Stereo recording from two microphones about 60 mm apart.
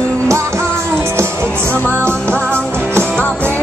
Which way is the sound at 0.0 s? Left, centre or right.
Centre.